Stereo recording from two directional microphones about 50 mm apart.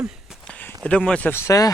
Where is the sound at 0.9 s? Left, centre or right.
Centre.